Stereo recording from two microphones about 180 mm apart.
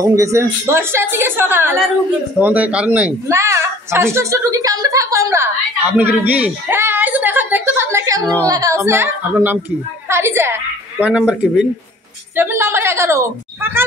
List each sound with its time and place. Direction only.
0.0 s a woman's voice: 15° right (ahead or behind)
12.4 s a woman's voice: 15° right (ahead or behind)